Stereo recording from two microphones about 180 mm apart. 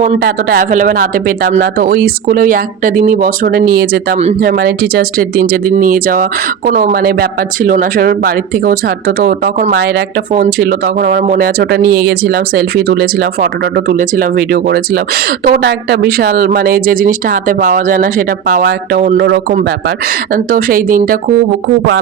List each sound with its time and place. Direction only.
0.2 s speech: 55° right (ahead or behind)
19.1 s a man's voice: 75° right (ahead or behind)
20.3 s speech: 50° right (ahead or behind)